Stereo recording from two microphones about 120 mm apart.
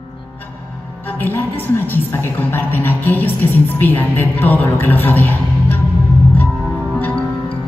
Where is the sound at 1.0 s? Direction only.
15° left (ahead or behind).